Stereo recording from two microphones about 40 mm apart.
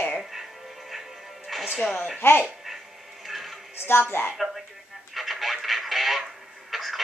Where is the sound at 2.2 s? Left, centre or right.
Left.